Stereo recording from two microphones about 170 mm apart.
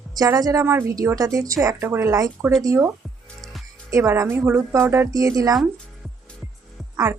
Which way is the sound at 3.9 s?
20° right (ahead or behind).